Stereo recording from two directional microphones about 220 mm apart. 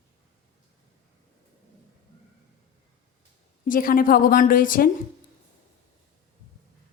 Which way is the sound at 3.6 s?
40° left (ahead or behind).